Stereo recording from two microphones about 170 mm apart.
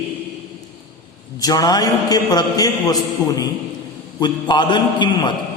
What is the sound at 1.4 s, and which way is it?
A man's voice, 20° left (ahead or behind).